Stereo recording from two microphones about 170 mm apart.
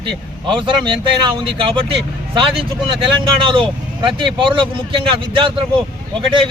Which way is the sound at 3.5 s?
30° right (ahead or behind).